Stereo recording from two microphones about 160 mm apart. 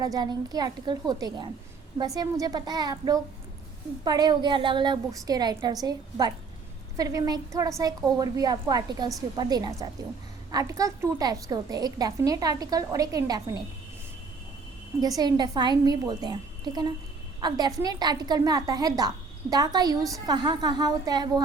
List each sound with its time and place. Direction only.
0.0 s a woman's voice: 25° right (ahead or behind)
15.0 s a woman's voice: 25° right (ahead or behind)